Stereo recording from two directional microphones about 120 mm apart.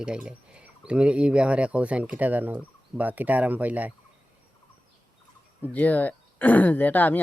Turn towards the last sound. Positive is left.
turn(degrees=15)  # may be behind; listen again after turning